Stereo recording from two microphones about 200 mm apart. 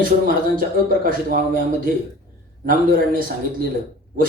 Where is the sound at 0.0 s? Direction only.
45° right (ahead or behind).